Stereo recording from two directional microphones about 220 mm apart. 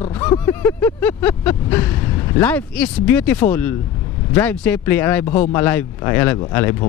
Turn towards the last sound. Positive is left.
turn(degrees=10)  # may be behind; listen again after turning